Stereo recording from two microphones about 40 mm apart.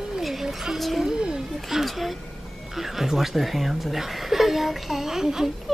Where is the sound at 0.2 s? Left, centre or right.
Centre.